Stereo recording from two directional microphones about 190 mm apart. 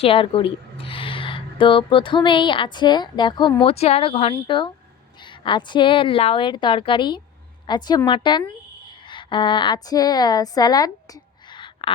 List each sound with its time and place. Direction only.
0.0 s a woman's voice: 30° left (ahead or behind)